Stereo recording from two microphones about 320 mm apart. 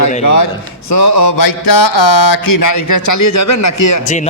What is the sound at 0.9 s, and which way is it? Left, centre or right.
Mantra, left.